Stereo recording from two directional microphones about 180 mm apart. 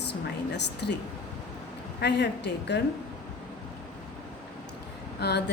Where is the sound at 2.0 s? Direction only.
70° left (ahead or behind).